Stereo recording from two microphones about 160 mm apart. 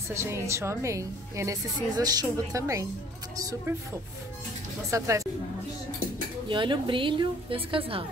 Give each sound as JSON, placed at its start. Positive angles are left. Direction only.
{"t": 0.1, "sound": "a woman's voice", "side_deg": -15}
{"t": 4.9, "sound": "a woman's voice", "side_deg": -20}
{"t": 6.5, "sound": "a woman's voice", "side_deg": -30}